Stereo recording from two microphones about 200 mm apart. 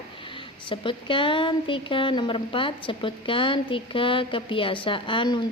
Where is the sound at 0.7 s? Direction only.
25° left (ahead or behind).